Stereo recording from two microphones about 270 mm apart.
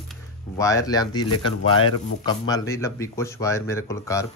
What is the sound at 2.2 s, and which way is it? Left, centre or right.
Speech, centre.